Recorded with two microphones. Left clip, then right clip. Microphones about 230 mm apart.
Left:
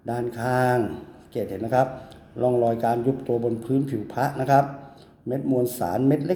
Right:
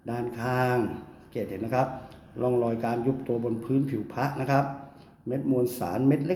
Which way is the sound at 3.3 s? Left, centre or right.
Left.